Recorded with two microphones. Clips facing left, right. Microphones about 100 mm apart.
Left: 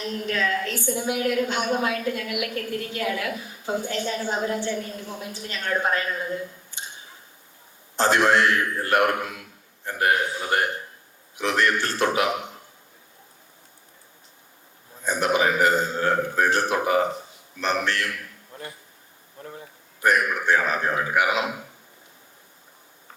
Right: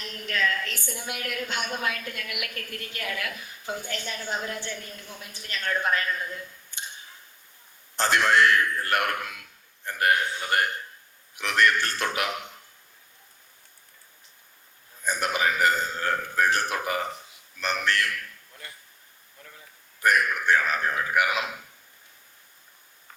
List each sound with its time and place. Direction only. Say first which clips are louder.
0.0 s a woman's voice: left 3 dB; 20° left (ahead or behind)
7.9 s a woman's voice: left 3 dB; 20° left (ahead or behind)
9.0 s a woman's voice: left 5 dB; 30° left (ahead or behind)
15.0 s a sound: left 4 dB; 20° left (ahead or behind)
16.7 s a woman's voice: left 7 dB; 20° left (ahead or behind)
19.4 s a sound: left 11 dB; 40° left (ahead or behind)
20.0 s a woman's voice: left 2 dB; 20° left (ahead or behind)